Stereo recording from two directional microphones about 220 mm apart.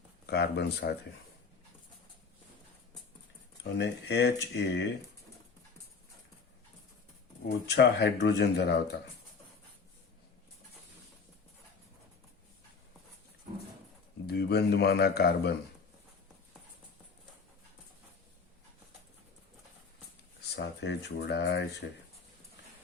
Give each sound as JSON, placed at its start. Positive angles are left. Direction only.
{"t": 0.3, "sound": "speech", "side_deg": 50}
{"t": 3.6, "sound": "speech", "side_deg": 50}
{"t": 7.4, "sound": "speech", "side_deg": 50}
{"t": 14.3, "sound": "speech", "side_deg": 50}
{"t": 20.6, "sound": "speech", "side_deg": 50}